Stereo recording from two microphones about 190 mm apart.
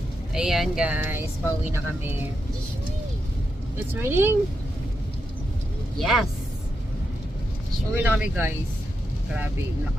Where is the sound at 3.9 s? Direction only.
10° right (ahead or behind).